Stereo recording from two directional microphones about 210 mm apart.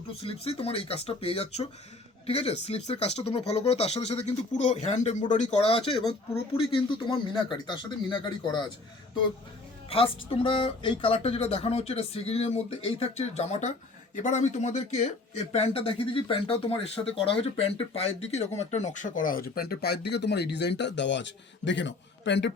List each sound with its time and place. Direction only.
0.2 s speech: 25° left (ahead or behind)
9.9 s speech: 25° left (ahead or behind); by 22.5 s 55° left (ahead or behind)